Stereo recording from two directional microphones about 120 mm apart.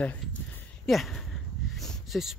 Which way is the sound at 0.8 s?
Centre (ahead or behind).